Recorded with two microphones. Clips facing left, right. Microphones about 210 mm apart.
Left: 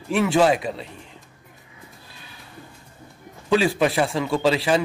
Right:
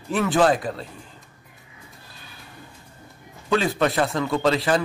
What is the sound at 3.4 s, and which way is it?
A man's voice, 10° left (ahead or behind).